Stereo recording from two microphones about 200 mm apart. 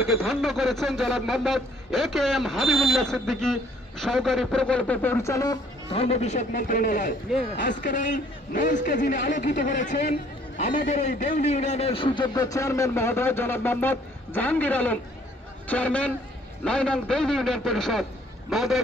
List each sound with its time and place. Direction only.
0.0 s speech: centre (ahead or behind); by 5.6 s 15° left (ahead or behind)
5.9 s a man's voice: 30° left (ahead or behind)
7.5 s speech: 60° left (ahead or behind)
8.5 s a man's voice: 45° left (ahead or behind); by 18.8 s centre (ahead or behind)